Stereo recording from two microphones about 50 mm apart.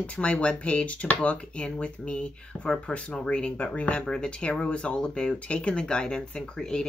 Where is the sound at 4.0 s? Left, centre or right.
Centre.